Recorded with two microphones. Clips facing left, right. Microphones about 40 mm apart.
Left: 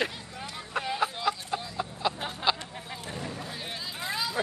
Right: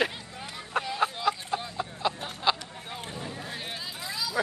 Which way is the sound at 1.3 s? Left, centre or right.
Centre.